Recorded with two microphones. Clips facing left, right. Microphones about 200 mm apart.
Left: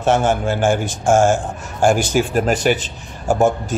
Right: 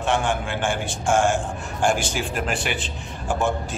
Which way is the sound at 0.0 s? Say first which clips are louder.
Left 7 dB; 40° left (ahead or behind).